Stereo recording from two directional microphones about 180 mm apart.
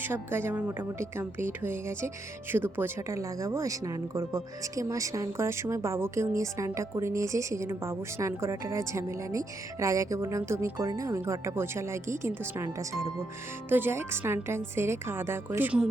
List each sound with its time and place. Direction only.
0.0 s speech: 10° right (ahead or behind)